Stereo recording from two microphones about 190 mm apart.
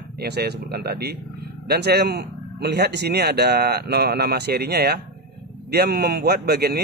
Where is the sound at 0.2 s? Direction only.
60° right (ahead or behind).